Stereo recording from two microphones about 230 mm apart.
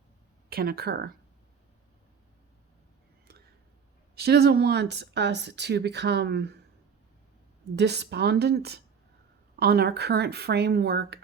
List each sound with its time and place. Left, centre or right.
0.5 s speech: right
4.2 s speech: right
7.8 s speech: right